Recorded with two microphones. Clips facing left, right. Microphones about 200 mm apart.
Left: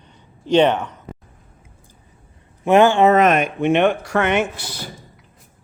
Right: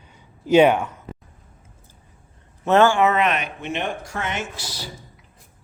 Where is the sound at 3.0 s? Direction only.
40° left (ahead or behind).